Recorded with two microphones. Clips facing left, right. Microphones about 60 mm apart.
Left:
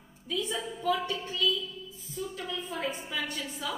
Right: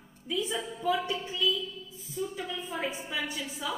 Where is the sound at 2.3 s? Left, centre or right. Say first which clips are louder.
Even; centre.